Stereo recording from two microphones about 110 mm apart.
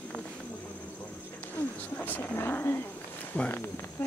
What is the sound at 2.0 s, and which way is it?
Speech, 15° left (ahead or behind).